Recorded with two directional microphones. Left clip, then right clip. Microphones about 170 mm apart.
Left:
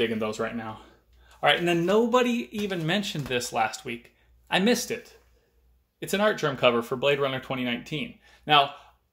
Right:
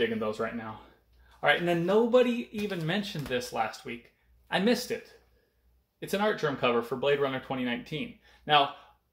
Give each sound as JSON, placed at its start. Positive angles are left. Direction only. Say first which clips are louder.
{"t": 0.2, "sound": "speech", "louder": "left 2 dB", "side_deg": 40}